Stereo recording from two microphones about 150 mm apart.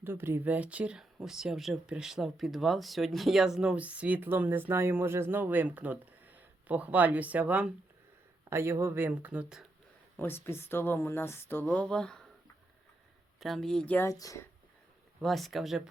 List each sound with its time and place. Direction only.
0.0 s speech: 15° right (ahead or behind)
10.2 s speech: 15° left (ahead or behind)
13.4 s speech: centre (ahead or behind)
14.1 s speech: 20° left (ahead or behind)
15.2 s speech: centre (ahead or behind)